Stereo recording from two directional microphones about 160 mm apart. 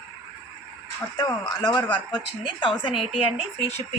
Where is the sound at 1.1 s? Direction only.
25° left (ahead or behind).